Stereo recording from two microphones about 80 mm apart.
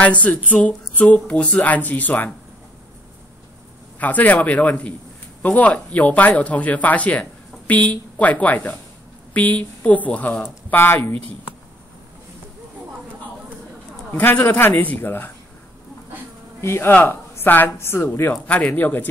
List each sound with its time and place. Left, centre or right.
0.0 s speech: centre
4.0 s speech: centre
14.1 s speech: left
16.6 s speech: left
18.3 s speech: centre